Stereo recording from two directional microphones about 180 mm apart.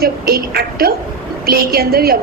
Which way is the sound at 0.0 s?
60° right (ahead or behind).